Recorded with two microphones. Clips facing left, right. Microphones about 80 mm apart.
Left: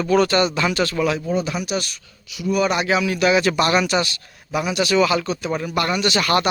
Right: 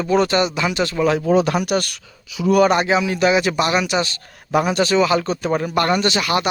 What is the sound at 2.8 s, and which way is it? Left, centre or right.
Speech, right.